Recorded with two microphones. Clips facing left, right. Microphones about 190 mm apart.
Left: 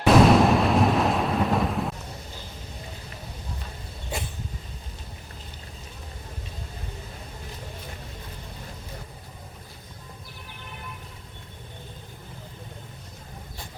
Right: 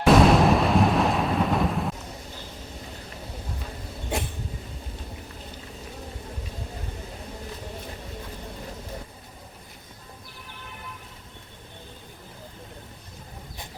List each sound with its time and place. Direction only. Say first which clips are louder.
0.0 s thunder: even; centre (ahead or behind)